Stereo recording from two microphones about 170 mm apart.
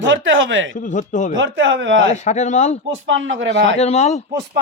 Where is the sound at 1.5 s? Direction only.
90° right.